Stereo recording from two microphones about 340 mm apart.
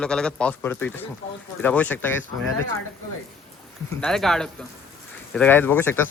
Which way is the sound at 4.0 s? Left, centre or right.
Centre.